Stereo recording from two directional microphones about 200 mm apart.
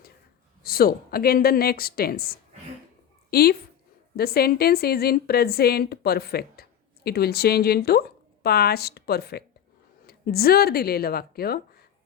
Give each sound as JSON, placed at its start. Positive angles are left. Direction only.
{"t": 0.6, "sound": "a woman's voice", "side_deg": 50}